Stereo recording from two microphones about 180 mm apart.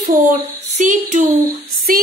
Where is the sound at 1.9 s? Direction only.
50° right (ahead or behind).